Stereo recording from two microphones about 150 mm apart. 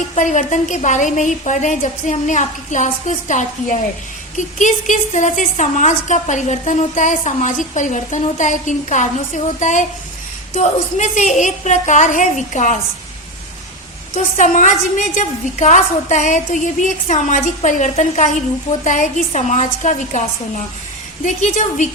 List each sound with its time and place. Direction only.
0.2 s a woman's voice: 55° left (ahead or behind)
14.3 s a woman's voice: 55° left (ahead or behind)
21.2 s a woman's voice: 50° left (ahead or behind)